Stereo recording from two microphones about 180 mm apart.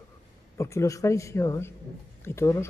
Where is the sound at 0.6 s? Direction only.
15° left (ahead or behind).